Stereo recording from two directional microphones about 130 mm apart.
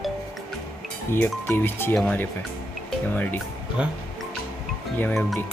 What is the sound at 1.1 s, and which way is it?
Speech, 15° left (ahead or behind).